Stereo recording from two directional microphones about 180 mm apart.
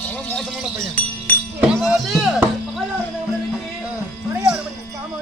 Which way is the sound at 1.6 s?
5° right (ahead or behind).